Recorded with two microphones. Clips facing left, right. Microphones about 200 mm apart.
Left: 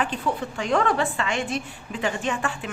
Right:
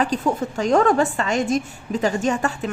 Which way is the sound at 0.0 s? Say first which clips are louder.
Right 5 dB; 40° right (ahead or behind).